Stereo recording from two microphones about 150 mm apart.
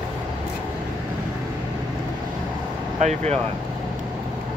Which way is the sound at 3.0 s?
50° right (ahead or behind).